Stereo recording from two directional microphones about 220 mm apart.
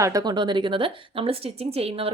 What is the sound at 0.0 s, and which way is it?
A woman's voice, 15° right (ahead or behind).